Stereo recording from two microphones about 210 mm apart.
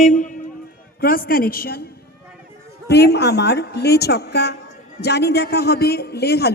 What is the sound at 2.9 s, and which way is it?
A woman's voice, 50° left (ahead or behind).